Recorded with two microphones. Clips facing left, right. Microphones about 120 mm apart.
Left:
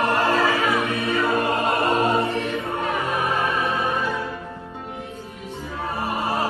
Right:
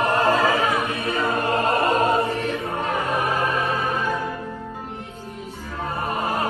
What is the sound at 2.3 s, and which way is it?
Music, centre (ahead or behind).